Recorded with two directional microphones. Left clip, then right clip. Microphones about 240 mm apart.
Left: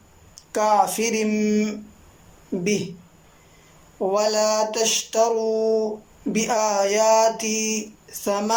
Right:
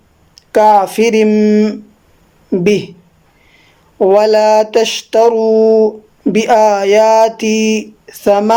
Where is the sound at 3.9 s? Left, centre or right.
Right.